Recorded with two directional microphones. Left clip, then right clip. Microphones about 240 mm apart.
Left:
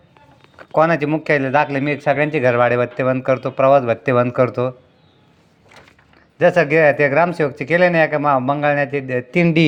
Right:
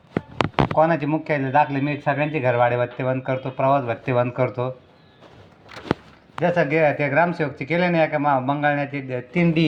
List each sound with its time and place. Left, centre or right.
0.8 s a man's voice: left
6.4 s a man's voice: left